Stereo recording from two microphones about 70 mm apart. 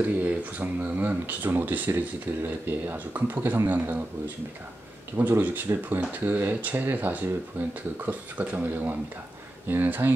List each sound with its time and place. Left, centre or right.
0.0 s speech: right
5.1 s speech: right